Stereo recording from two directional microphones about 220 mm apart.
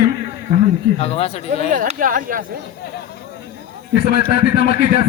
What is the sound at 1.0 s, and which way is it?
Speech, 25° left (ahead or behind).